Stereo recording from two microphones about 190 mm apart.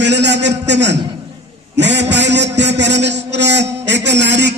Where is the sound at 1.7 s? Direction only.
65° right (ahead or behind).